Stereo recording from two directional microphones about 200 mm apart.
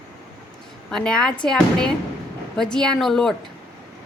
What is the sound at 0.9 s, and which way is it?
Speech, 5° left (ahead or behind).